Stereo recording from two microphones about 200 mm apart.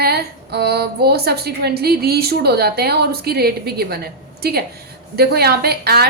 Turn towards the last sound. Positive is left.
turn(degrees=-50)  # may be behind; listen again after turning